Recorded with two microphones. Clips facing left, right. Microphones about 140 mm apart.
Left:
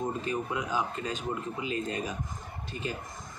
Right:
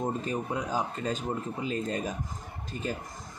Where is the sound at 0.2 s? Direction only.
40° right (ahead or behind).